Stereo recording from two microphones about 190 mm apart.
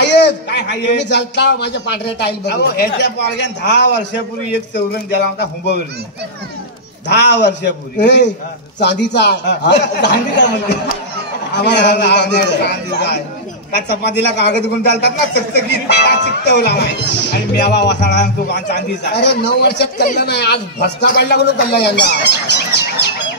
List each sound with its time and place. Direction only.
0.0 s speech: 65° left (ahead or behind)
7.1 s speech: 60° left (ahead or behind)